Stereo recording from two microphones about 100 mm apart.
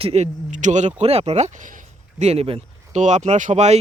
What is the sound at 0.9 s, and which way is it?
Speech, 90° right.